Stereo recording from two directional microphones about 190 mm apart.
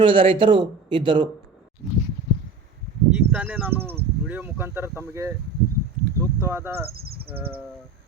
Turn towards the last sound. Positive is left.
turn(degrees=-55)  # may be behind; listen again after turning